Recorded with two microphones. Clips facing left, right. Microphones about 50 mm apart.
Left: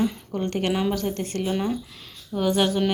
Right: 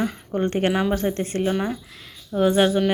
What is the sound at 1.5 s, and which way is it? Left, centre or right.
Speech, centre.